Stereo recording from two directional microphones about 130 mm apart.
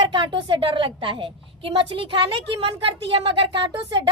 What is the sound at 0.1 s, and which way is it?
A woman's voice, 40° right (ahead or behind).